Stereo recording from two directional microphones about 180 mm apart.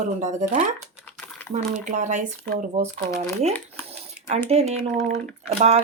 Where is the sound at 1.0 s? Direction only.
10° left (ahead or behind).